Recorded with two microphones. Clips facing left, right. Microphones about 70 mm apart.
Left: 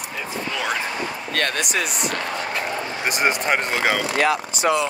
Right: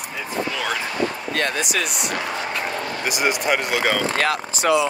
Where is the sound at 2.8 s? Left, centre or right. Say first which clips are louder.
Right 1 dB; left.